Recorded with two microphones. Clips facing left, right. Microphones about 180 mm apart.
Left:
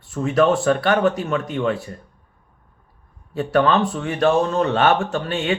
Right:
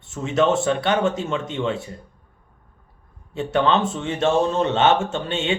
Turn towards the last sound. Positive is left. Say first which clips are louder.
# left 2 dB
turn(degrees=-25)  # may be behind; listen again after turning